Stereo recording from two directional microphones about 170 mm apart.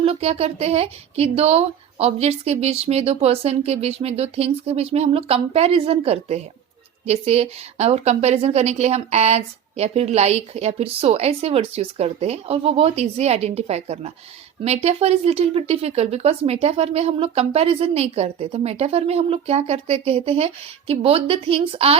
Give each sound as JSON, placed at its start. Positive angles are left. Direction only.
{"t": 0.0, "sound": "speech", "side_deg": -35}